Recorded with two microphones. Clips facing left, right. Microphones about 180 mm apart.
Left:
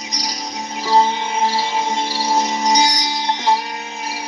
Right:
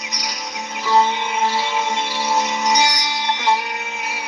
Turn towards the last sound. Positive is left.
turn(degrees=35)  # may be behind; listen again after turning